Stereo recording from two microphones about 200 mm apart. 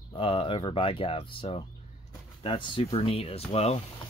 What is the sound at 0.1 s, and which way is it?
Speech, 25° left (ahead or behind).